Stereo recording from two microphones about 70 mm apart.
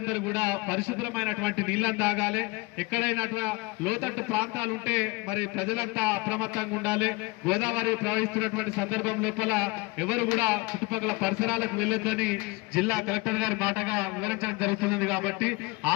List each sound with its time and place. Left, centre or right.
0.1 s a man's voice: right